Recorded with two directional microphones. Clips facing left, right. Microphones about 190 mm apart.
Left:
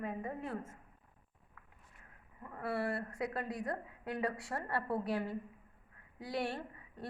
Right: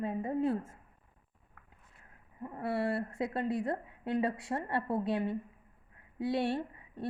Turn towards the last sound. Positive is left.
turn(degrees=-25)  # may be behind; listen again after turning